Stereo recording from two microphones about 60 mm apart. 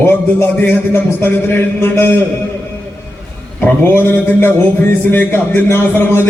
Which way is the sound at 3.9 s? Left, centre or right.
Left.